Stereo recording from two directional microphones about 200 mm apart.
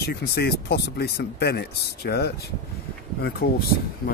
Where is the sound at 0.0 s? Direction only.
50° left (ahead or behind).